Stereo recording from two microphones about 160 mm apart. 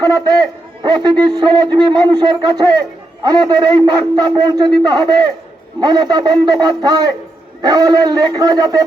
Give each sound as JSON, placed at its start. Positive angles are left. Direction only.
{"t": 0.0, "sound": "speech", "side_deg": -25}